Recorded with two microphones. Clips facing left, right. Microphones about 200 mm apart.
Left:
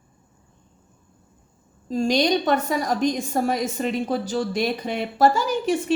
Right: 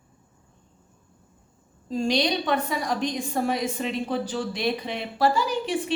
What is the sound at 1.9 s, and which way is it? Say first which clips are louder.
A woman's voice: left 4 dB; 45° left (ahead or behind).